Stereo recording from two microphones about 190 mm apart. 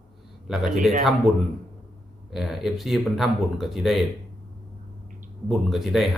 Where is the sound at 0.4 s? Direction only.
5° right (ahead or behind).